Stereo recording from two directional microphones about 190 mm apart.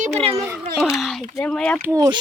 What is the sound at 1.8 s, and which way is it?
Speech, 20° right (ahead or behind).